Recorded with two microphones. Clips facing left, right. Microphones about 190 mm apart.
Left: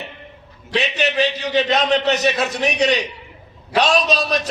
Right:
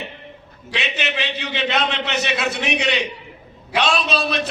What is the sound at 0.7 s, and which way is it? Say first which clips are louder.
A man's voice: left 5 dB; 40° left (ahead or behind).